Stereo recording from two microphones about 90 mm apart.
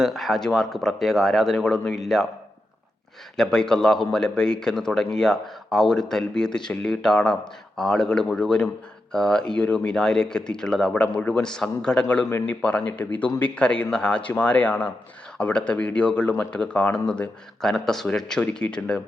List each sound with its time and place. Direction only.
0.0 s speech: centre (ahead or behind)
3.3 s speech: 5° left (ahead or behind)